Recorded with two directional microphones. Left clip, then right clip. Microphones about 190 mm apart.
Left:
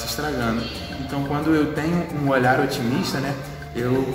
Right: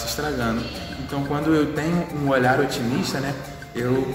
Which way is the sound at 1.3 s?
15° right (ahead or behind).